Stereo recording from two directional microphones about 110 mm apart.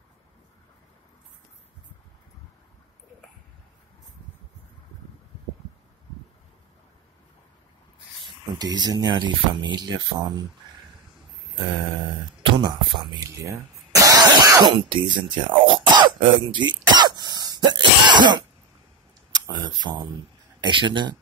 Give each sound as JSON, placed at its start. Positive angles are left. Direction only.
{"t": 8.2, "sound": "speech", "side_deg": -40}
{"t": 12.4, "sound": "speech", "side_deg": -50}
{"t": 13.2, "sound": "throat clearing", "side_deg": -30}
{"t": 19.3, "sound": "speech", "side_deg": -40}